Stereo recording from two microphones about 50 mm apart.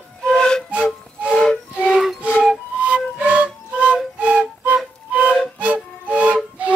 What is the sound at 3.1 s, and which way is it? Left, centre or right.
Music, right.